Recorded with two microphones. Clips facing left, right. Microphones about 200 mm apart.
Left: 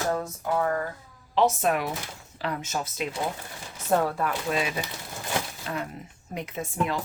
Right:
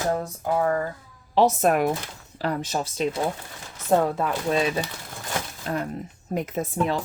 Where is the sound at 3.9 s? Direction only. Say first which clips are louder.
Right 3 dB; 20° right (ahead or behind).